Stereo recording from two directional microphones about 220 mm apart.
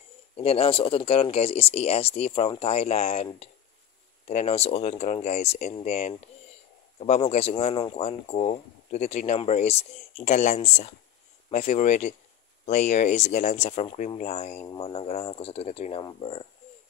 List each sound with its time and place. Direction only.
0.4 s speech: 25° left (ahead or behind)